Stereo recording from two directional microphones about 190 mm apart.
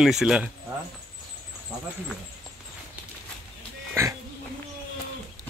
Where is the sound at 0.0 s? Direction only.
5° right (ahead or behind).